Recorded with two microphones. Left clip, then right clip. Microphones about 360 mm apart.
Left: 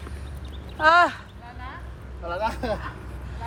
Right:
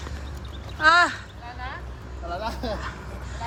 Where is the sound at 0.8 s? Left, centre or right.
Centre.